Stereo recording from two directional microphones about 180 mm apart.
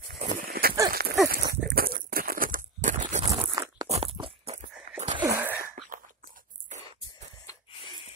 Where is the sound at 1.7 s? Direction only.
55° right (ahead or behind).